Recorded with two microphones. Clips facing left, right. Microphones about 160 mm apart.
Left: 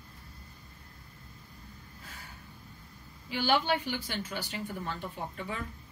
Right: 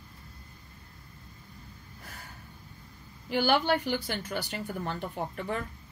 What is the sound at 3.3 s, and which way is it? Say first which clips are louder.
Speech: right 3 dB; 55° right (ahead or behind).